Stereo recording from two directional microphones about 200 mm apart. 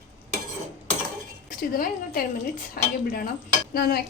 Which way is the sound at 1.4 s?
45° left (ahead or behind).